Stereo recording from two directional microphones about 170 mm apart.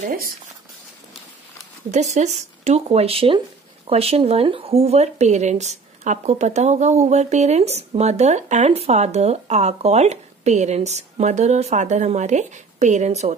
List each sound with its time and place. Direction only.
0.0 s speech: 55° right (ahead or behind)
1.9 s speech: 40° right (ahead or behind)